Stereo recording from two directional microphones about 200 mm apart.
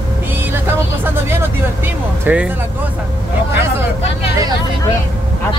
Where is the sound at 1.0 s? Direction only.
10° right (ahead or behind).